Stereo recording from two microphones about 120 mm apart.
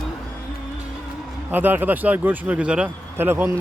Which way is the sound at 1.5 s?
15° right (ahead or behind).